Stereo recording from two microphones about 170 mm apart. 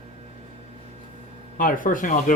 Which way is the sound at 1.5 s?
55° left (ahead or behind).